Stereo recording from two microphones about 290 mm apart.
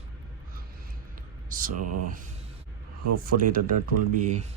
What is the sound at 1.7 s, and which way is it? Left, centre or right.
Speech, right.